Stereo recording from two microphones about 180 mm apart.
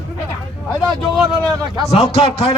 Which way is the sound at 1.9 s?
35° left (ahead or behind).